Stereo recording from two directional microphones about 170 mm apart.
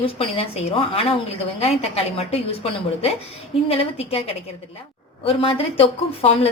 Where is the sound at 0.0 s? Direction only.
35° left (ahead or behind).